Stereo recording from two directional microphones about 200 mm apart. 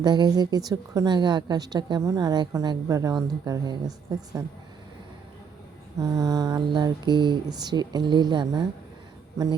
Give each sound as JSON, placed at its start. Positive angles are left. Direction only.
{"t": 0.0, "sound": "a woman's voice", "side_deg": -20}
{"t": 6.0, "sound": "a woman's voice", "side_deg": -15}